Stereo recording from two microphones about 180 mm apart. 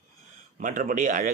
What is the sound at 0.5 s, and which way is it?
Speech, 45° right (ahead or behind).